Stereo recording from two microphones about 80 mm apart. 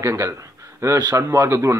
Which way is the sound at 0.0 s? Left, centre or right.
Right.